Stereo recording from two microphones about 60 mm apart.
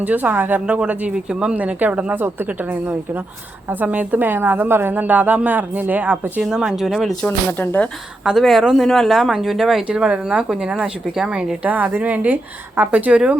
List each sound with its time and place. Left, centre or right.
0.0 s a woman's voice: right
0.6 s a woman's voice: centre
6.4 s speech: centre
6.8 s speech: centre
7.3 s speech: left
8.4 s speech: centre
9.8 s speech: centre
11.6 s a woman's voice: right